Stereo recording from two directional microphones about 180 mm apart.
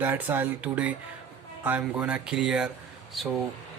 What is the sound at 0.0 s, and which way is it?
Speech, 10° right (ahead or behind).